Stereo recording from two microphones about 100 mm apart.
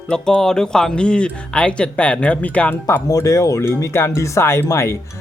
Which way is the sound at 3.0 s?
35° left (ahead or behind).